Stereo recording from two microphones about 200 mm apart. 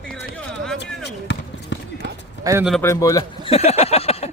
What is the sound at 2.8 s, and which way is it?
Speech, 15° left (ahead or behind).